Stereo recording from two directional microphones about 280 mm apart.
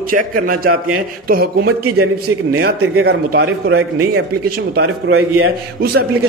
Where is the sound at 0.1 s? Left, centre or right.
Right.